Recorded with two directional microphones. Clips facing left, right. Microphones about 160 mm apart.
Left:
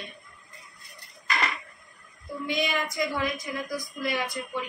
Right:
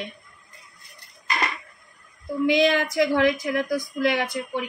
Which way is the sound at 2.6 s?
70° right (ahead or behind).